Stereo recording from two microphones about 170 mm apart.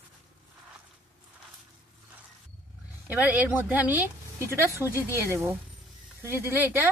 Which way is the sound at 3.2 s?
10° right (ahead or behind).